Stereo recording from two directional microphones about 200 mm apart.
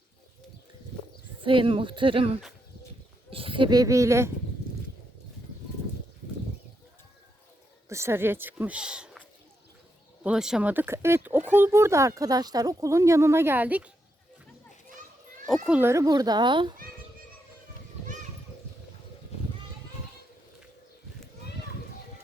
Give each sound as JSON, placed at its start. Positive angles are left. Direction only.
{"t": 1.4, "sound": "speech", "side_deg": -25}
{"t": 7.9, "sound": "speech", "side_deg": -15}
{"t": 10.2, "sound": "speech", "side_deg": -5}
{"t": 15.4, "sound": "speech", "side_deg": 0}